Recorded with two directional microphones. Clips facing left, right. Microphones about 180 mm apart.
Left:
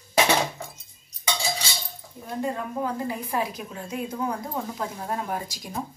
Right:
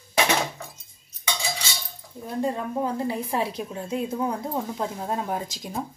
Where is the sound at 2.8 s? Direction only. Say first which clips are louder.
Right 2 dB; 25° right (ahead or behind).